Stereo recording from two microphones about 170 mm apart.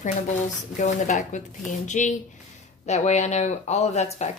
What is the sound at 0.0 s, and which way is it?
Speech, 45° left (ahead or behind).